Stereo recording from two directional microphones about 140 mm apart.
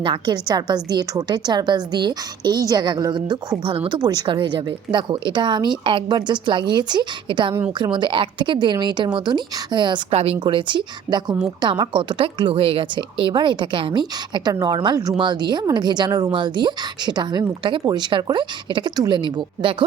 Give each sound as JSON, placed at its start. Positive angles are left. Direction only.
{"t": 0.0, "sound": "a woman's voice", "side_deg": -35}